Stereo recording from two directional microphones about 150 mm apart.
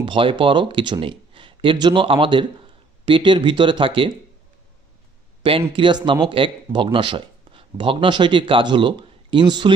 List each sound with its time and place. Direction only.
0.0 s speech: 35° right (ahead or behind)
5.4 s speech: 35° right (ahead or behind)